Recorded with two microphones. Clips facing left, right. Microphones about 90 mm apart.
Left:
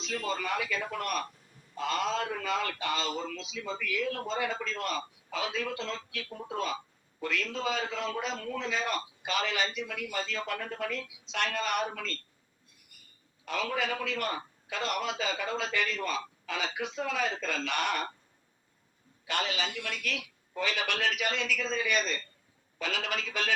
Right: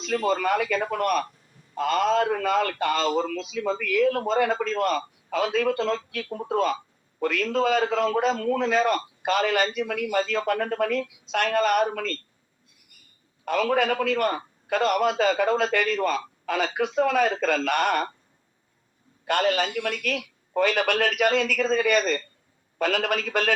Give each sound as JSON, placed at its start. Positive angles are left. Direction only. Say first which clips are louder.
{"t": 0.0, "sound": "a man's voice", "louder": "right 10 dB", "side_deg": -50}
{"t": 13.4, "sound": "a man's voice", "louder": "right 9 dB", "side_deg": -55}
{"t": 19.2, "sound": "a man's voice", "louder": "right 10 dB", "side_deg": -55}